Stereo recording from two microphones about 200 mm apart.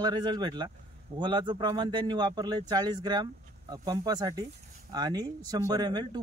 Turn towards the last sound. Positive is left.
turn(degrees=-20)  # may be behind; listen again after turning